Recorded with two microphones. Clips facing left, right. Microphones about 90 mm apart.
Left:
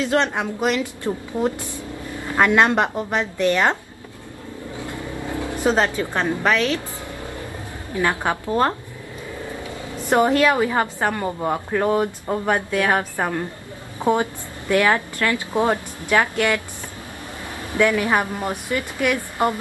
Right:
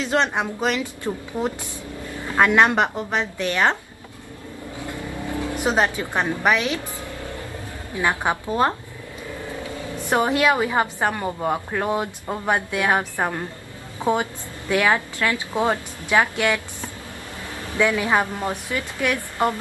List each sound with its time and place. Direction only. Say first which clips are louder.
0.0 s a woman's voice: left 1 dB; 20° right (ahead or behind)
5.3 s vehicle: even; 20° left (ahead or behind)
5.6 s a woman's voice: left 2 dB; 15° right (ahead or behind)
8.0 s a woman's voice: left 1 dB; 15° right (ahead or behind)
10.0 s a woman's voice: left 3 dB; 15° right (ahead or behind)
11.2 s speech: left 1 dB; centre (ahead or behind)
11.5 s a woman's voice: left 3 dB; 10° right (ahead or behind)
14.0 s speech: left 2 dB; 15° left (ahead or behind)
14.7 s a woman's voice: left 2 dB; 15° right (ahead or behind)
17.8 s a woman's voice: left 2 dB; 20° right (ahead or behind)
18.1 s a woman's voice: even; 15° left (ahead or behind)